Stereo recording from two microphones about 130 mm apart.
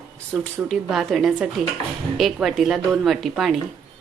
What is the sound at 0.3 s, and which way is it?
Speech, centre (ahead or behind).